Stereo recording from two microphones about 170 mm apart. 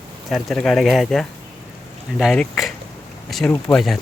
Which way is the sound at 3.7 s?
Centre (ahead or behind).